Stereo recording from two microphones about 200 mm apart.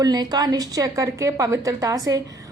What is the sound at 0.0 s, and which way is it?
A woman's voice, 20° right (ahead or behind).